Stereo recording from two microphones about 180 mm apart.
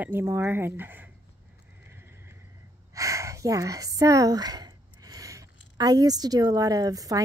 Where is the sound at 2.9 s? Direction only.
15° right (ahead or behind).